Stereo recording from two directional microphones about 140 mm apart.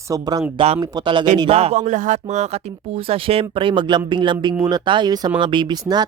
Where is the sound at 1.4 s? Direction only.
45° right (ahead or behind).